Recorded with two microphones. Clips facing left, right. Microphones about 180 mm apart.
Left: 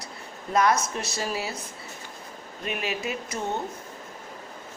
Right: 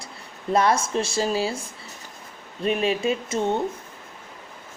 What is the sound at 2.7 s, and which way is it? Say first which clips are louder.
Speech: right 8 dB; 30° right (ahead or behind).